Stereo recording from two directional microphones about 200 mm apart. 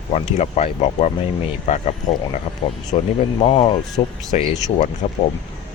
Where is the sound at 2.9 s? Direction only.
30° left (ahead or behind).